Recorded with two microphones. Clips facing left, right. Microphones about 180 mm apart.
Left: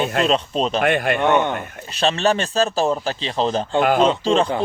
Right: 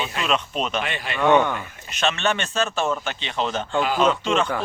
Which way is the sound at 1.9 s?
35° left (ahead or behind).